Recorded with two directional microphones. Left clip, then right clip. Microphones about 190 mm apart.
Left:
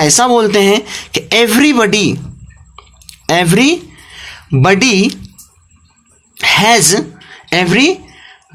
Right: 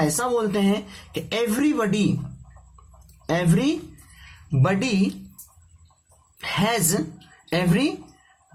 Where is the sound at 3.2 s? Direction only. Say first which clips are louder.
Left 13 dB; 35° left (ahead or behind).